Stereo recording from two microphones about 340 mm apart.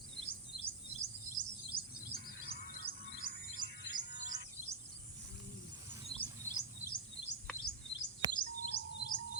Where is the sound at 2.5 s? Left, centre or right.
Left.